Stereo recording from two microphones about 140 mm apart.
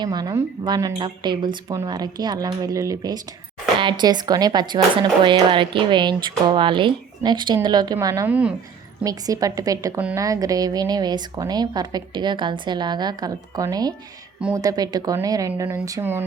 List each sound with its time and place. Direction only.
0.0 s a woman's voice: 30° right (ahead or behind)
8.3 s a woman's voice: 10° right (ahead or behind)
9.0 s a woman's voice: 25° right (ahead or behind)